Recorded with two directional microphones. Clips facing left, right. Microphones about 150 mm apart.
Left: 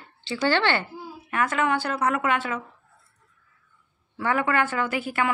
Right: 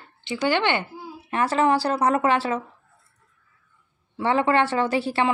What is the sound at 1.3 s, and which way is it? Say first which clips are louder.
A woman's voice: right 4 dB; 30° right (ahead or behind).